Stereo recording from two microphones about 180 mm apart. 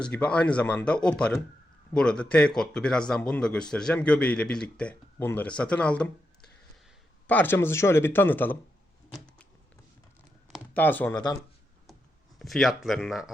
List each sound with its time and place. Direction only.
0.0 s speech: 5° left (ahead or behind)
7.3 s speech: 10° left (ahead or behind)
9.1 s a sound: 5° left (ahead or behind)
10.8 s speech: 10° left (ahead or behind)
12.4 s speech: centre (ahead or behind)